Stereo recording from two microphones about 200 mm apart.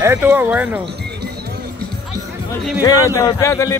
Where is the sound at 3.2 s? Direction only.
15° left (ahead or behind).